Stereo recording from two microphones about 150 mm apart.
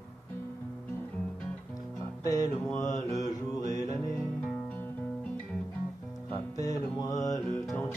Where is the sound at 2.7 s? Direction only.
20° left (ahead or behind).